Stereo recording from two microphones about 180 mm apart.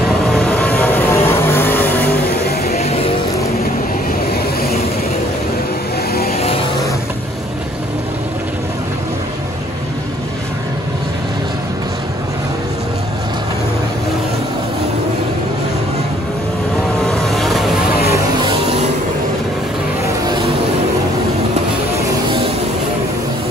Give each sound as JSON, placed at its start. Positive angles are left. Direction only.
{"t": 0.3, "sound": "vehicle", "side_deg": 5}
{"t": 2.7, "sound": "music", "side_deg": 35}
{"t": 17.0, "sound": "boat", "side_deg": 5}